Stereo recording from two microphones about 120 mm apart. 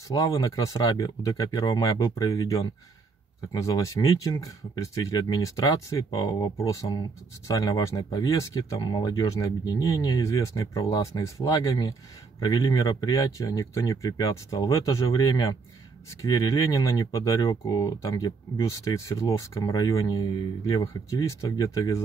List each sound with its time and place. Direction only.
0.1 s speech: 30° left (ahead or behind)